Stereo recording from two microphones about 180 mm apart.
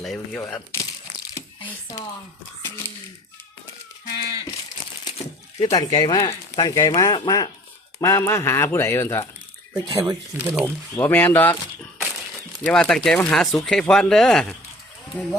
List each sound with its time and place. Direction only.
0.0 s speech: centre (ahead or behind)
0.4 s speech: 15° left (ahead or behind)
2.6 s a sound: 15° left (ahead or behind)
5.6 s speech: 20° left (ahead or behind)
9.7 s speech: 25° right (ahead or behind)
10.3 s speech: 10° right (ahead or behind)
10.9 s speech: 10° left (ahead or behind)
12.6 s speech: 5° left (ahead or behind)